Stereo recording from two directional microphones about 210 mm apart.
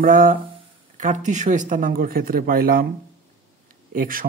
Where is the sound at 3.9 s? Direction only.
40° right (ahead or behind).